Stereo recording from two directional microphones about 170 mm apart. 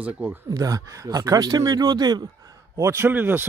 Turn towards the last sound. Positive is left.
turn(degrees=-10)  # may be behind; listen again after turning